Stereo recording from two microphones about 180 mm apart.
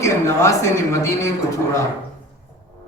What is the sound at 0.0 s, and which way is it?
Speech, 15° left (ahead or behind).